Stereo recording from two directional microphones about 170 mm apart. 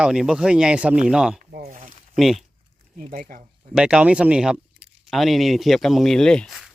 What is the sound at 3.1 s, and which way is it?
Speech, 55° right (ahead or behind).